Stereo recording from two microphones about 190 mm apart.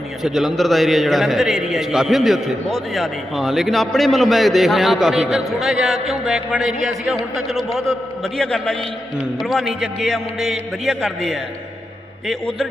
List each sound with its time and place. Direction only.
0.2 s a man's voice: centre (ahead or behind)